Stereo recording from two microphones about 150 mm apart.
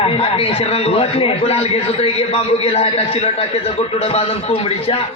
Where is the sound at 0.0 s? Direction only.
40° left (ahead or behind).